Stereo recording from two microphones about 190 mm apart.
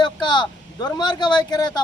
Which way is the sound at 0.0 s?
25° left (ahead or behind).